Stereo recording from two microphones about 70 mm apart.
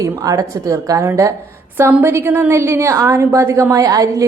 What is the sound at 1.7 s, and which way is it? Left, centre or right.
A woman's voice, right.